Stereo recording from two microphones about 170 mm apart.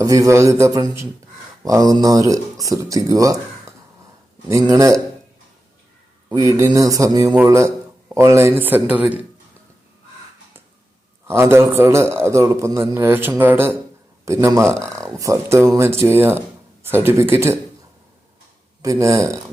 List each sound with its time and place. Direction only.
0.0 s speech: 20° right (ahead or behind)
6.2 s speech: 20° right (ahead or behind)
11.3 s speech: 15° right (ahead or behind)
18.8 s speech: 20° right (ahead or behind)